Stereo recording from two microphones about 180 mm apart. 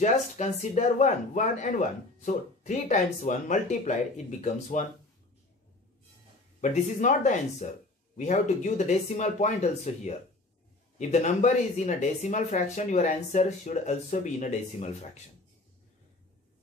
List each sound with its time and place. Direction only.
0.0 s speech: 40° left (ahead or behind)
6.6 s speech: 45° left (ahead or behind)